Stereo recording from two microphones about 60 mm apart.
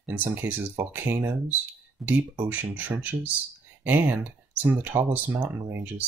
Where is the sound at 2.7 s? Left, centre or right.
Right.